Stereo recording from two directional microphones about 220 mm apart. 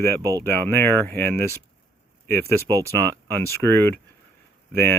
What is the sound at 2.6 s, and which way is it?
Speech, 15° right (ahead or behind).